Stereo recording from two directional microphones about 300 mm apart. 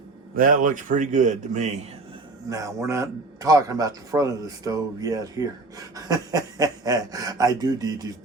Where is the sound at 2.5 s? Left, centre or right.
Centre.